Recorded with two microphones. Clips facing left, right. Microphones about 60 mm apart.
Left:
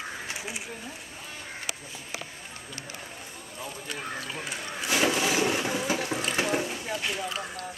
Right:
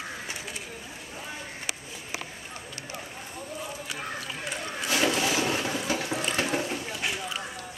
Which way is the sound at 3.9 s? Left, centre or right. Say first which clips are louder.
Left 3 dB; centre.